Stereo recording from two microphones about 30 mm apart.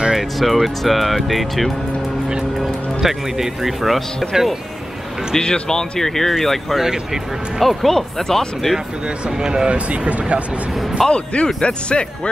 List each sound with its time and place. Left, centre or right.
0.1 s speech: centre
3.8 s speech: centre
5.4 s speech: left; by 6.8 s centre
6.8 s speech: centre
7.6 s speech: centre
9.7 s speech: right
10.7 s speech: centre
11.1 s speech: left